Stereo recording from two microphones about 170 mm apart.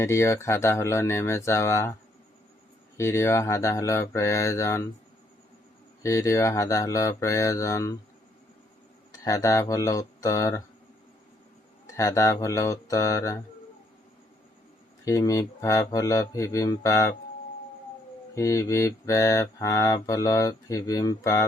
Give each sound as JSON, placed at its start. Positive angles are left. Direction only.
{"t": 0.0, "sound": "speech", "side_deg": 15}
{"t": 3.0, "sound": "speech", "side_deg": 15}
{"t": 6.0, "sound": "mantra", "side_deg": 20}
{"t": 9.2, "sound": "mantra", "side_deg": 20}
{"t": 11.9, "sound": "mantra", "side_deg": 20}
{"t": 15.0, "sound": "mantra", "side_deg": 20}
{"t": 18.3, "sound": "mantra", "side_deg": 20}